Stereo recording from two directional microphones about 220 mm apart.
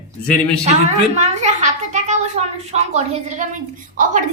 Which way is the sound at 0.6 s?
30° right (ahead or behind).